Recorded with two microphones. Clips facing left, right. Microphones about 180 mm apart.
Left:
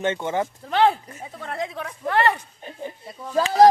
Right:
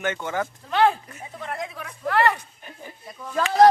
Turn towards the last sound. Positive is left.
turn(degrees=35)  # may be behind; listen again after turning